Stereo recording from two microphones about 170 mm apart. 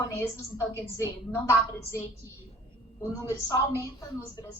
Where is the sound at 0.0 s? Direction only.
15° left (ahead or behind).